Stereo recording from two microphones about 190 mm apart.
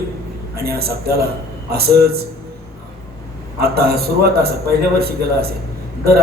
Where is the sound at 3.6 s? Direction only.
55° right (ahead or behind).